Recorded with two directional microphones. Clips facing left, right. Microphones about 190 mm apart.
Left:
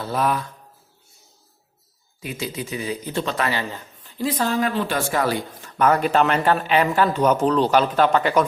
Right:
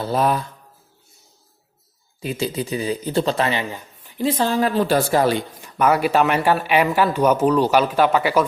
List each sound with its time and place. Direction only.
0.0 s speech: 30° right (ahead or behind)
2.2 s speech: 30° right (ahead or behind); by 4.3 s 15° right (ahead or behind)
4.3 s speech: 30° right (ahead or behind)
5.7 s speech: 10° right (ahead or behind)